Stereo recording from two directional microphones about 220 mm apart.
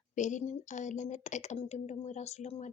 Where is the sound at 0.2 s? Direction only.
35° left (ahead or behind).